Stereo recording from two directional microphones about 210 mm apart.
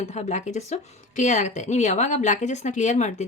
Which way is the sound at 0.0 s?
30° left (ahead or behind).